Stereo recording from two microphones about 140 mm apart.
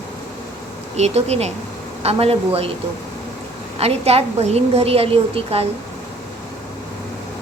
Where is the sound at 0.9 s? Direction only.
50° right (ahead or behind).